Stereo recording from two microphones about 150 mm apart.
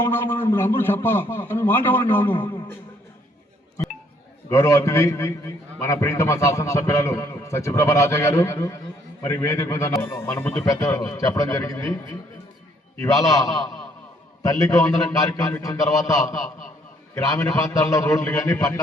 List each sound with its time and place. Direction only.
0.0 s a man's voice: 15° left (ahead or behind)
4.4 s a man's voice: 20° left (ahead or behind)
13.2 s a man's voice: 20° left (ahead or behind)